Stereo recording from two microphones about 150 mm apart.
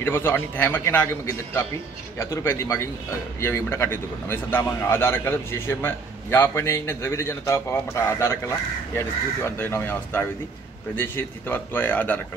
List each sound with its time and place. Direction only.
0.0 s a man's voice: 15° left (ahead or behind)